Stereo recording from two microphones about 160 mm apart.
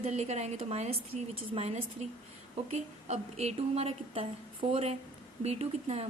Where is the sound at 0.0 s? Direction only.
45° right (ahead or behind).